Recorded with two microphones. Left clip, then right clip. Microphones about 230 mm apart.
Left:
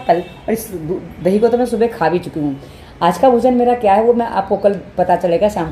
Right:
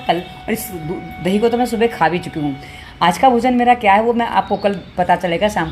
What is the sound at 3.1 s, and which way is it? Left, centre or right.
Speech, right.